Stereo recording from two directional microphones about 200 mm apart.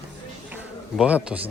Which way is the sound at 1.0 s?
5° right (ahead or behind).